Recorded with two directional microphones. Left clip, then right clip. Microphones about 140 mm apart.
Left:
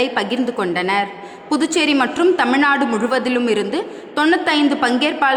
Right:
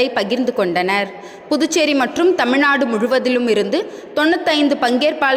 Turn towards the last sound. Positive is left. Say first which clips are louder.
# right 1 dB
turn(degrees=-25)  # may be behind; listen again after turning